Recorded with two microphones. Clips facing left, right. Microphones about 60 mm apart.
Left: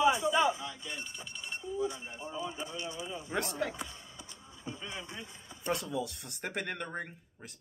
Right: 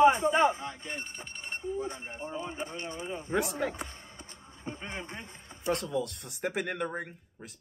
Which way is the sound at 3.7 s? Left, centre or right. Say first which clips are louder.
Right 2 dB; right.